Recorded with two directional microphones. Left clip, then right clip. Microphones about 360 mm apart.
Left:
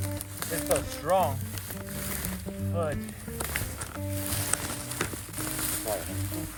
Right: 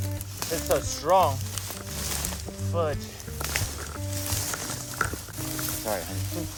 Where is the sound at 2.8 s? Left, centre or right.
Centre.